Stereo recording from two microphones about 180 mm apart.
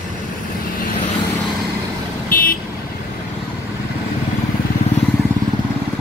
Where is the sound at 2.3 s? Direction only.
55° left (ahead or behind).